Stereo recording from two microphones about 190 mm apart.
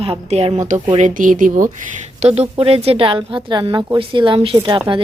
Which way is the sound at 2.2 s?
35° right (ahead or behind).